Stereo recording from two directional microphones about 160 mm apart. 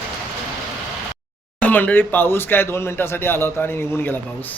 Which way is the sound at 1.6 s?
10° left (ahead or behind).